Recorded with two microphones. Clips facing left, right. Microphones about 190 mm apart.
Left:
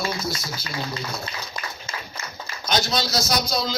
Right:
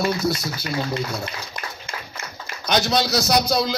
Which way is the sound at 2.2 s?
55° right (ahead or behind).